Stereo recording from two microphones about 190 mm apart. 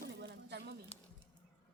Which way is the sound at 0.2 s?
65° right (ahead or behind).